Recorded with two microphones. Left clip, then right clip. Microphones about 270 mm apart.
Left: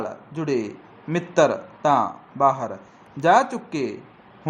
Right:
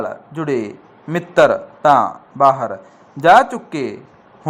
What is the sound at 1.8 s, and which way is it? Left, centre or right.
A man's voice, centre.